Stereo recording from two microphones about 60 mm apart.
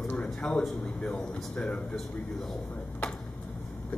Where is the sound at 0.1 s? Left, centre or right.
Centre.